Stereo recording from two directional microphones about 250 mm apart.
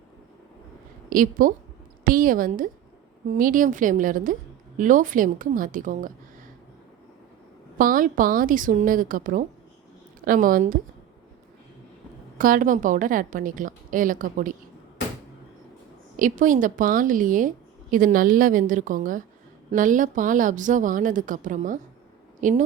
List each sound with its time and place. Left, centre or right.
1.1 s a woman's voice: right
7.8 s a woman's voice: right
12.4 s a woman's voice: right
16.1 s a woman's voice: right